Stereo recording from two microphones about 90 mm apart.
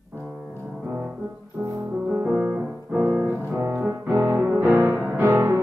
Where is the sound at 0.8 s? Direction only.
20° right (ahead or behind).